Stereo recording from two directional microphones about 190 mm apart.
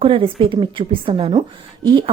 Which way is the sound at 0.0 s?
30° right (ahead or behind).